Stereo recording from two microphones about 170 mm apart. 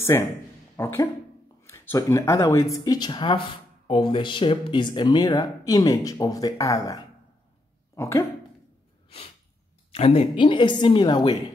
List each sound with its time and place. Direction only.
0.0 s speech: 15° left (ahead or behind)
9.9 s speech: 35° left (ahead or behind)